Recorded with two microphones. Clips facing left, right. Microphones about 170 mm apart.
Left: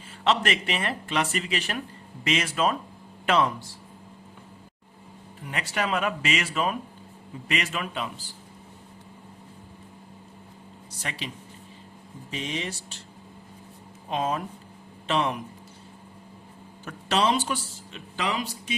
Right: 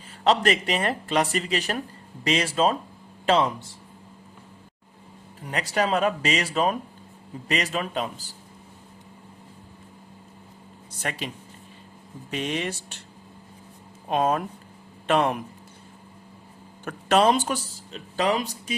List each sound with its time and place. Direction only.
0.3 s speech: 40° right (ahead or behind)
5.5 s speech: 35° right (ahead or behind)
11.0 s speech: 50° right (ahead or behind)
12.3 s speech: 60° right (ahead or behind)
14.1 s a man's voice: 55° right (ahead or behind)
16.8 s speech: 50° right (ahead or behind)